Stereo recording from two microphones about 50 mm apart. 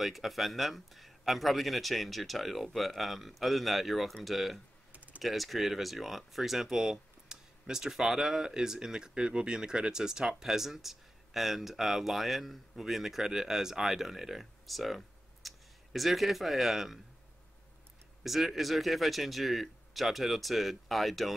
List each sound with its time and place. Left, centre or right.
0.0 s speech: centre
4.9 s typing: right
5.2 s speech: centre
18.2 s speech: centre